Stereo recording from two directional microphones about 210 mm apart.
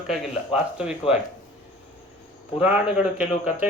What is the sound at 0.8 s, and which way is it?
Speech, 5° right (ahead or behind).